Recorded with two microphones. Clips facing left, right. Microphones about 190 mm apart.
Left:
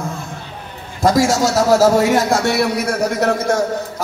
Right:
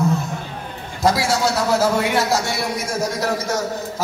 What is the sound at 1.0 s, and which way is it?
A man's voice, 45° left (ahead or behind).